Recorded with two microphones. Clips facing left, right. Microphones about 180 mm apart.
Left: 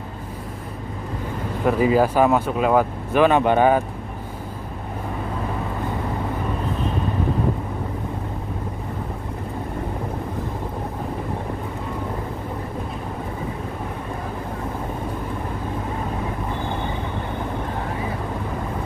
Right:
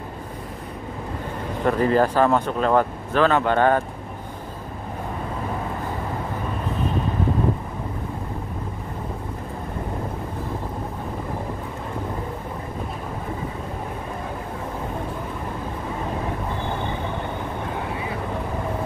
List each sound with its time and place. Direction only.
1.6 s speech: 5° left (ahead or behind)